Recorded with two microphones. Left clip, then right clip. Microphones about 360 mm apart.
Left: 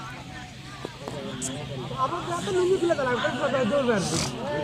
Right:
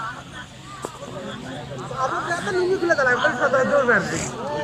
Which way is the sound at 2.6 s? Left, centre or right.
Right.